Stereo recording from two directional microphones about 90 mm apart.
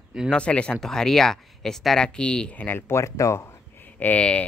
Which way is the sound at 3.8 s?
20° left (ahead or behind).